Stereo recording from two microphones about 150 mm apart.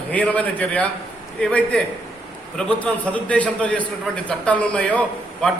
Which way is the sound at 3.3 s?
10° left (ahead or behind).